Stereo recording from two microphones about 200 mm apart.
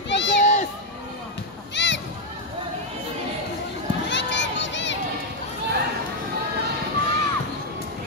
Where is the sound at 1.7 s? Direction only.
60° left (ahead or behind).